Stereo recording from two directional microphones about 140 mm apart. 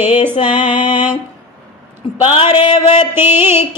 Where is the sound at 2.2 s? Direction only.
40° left (ahead or behind).